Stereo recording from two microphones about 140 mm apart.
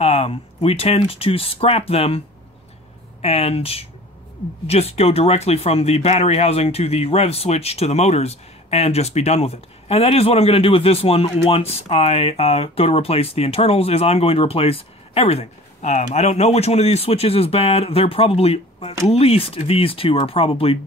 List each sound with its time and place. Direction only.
0.0 s speech: 45° left (ahead or behind)